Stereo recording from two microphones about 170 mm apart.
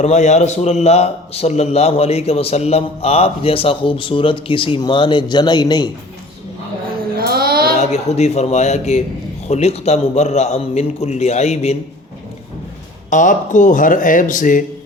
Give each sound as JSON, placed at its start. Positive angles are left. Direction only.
{"t": 0.0, "sound": "a man's voice", "side_deg": 45}
{"t": 7.2, "sound": "a sound", "side_deg": -65}
{"t": 7.8, "sound": "a man's voice", "side_deg": 40}
{"t": 13.1, "sound": "speech", "side_deg": 50}